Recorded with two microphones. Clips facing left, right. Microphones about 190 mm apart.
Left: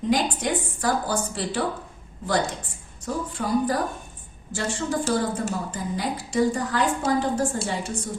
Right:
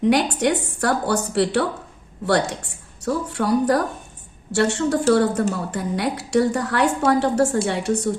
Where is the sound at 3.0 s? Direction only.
75° right (ahead or behind).